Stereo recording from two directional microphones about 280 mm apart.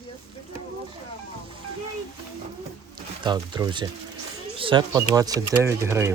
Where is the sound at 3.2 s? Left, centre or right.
Centre.